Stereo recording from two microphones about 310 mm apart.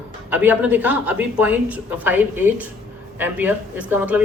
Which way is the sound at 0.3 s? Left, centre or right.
Centre.